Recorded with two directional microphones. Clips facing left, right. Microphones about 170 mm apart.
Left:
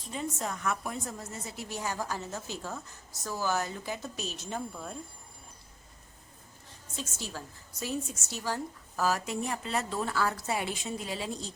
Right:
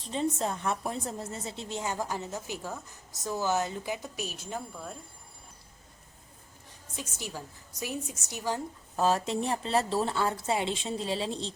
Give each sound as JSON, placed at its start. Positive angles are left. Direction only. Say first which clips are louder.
{"t": 0.0, "sound": "a woman's voice", "louder": "right 5 dB", "side_deg": -30}
{"t": 6.9, "sound": "a woman's voice", "louder": "even", "side_deg": -15}